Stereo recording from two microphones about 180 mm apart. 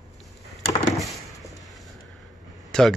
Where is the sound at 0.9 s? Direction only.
Centre (ahead or behind).